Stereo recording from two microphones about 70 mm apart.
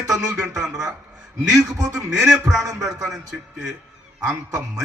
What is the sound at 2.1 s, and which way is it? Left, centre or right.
Music, centre.